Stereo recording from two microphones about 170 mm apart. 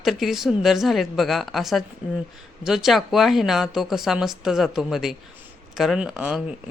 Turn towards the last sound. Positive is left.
turn(degrees=-5)  # may be behind; listen again after turning